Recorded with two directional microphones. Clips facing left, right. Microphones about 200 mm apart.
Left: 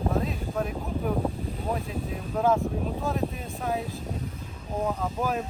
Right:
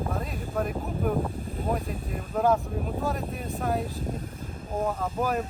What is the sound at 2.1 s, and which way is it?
Speech, centre (ahead or behind).